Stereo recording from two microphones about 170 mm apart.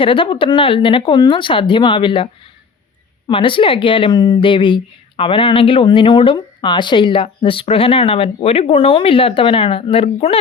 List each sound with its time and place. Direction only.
0.0 s a woman's voice: 30° left (ahead or behind)
3.2 s a woman's voice: 30° left (ahead or behind)